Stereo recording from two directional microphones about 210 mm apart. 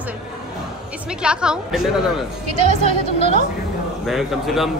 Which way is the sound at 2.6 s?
35° right (ahead or behind).